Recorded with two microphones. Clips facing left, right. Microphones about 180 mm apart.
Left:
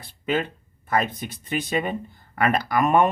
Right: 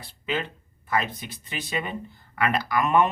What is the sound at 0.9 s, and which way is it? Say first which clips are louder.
Speech: left 3 dB; 50° left (ahead or behind).